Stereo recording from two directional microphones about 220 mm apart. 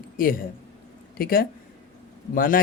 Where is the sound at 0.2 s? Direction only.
40° left (ahead or behind).